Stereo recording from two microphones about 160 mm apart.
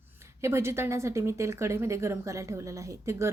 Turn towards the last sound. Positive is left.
turn(degrees=-20)  # may be behind; listen again after turning